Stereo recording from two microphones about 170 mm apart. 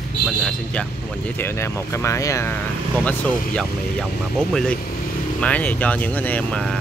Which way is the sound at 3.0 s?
5° left (ahead or behind).